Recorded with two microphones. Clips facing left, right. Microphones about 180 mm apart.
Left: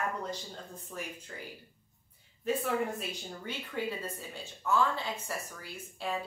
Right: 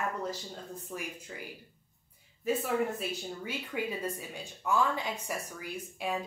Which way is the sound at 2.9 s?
10° right (ahead or behind).